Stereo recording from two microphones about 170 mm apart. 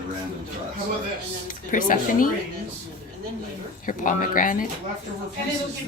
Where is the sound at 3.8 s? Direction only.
50° left (ahead or behind).